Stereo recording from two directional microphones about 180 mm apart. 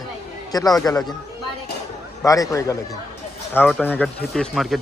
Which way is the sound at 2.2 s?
20° left (ahead or behind).